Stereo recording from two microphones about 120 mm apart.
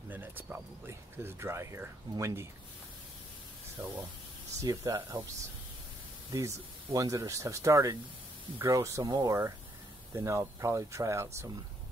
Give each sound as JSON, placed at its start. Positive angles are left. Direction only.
{"t": 0.1, "sound": "speech", "side_deg": -15}
{"t": 3.8, "sound": "speech", "side_deg": -25}
{"t": 6.3, "sound": "speech", "side_deg": -25}
{"t": 10.1, "sound": "speech", "side_deg": -25}